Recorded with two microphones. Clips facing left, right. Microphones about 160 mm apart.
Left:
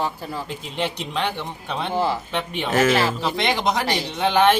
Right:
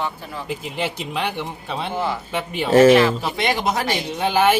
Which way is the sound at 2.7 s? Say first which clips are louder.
Right 8 dB; 30° right (ahead or behind).